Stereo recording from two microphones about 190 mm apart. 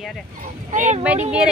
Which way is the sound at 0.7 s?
40° right (ahead or behind).